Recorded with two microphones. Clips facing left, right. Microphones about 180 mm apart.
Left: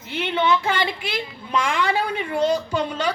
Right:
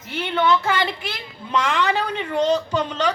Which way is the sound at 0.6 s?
15° left (ahead or behind).